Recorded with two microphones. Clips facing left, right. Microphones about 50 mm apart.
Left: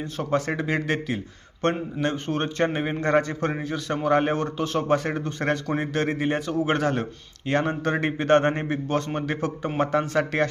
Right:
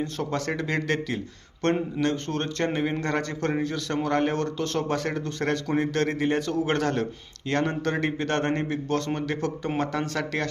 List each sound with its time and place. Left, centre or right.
0.0 s a man's voice: centre